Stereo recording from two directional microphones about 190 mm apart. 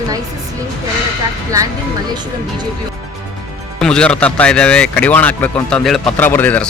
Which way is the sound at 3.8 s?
5° left (ahead or behind).